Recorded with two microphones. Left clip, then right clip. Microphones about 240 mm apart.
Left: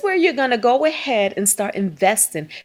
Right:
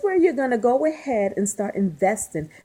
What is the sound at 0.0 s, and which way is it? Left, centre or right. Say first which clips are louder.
Speech: left 2 dB; left.